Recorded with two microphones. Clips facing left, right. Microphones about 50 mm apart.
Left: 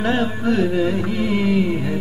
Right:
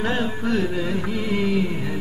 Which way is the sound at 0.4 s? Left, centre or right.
Centre.